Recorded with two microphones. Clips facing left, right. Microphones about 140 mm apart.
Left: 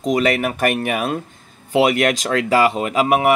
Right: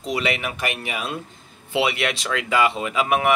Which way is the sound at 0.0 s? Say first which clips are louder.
Left 7 dB; 45° left (ahead or behind).